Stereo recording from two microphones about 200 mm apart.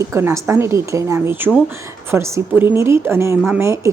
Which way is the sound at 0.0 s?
15° right (ahead or behind).